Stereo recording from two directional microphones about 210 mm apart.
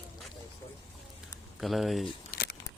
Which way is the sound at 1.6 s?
Centre (ahead or behind).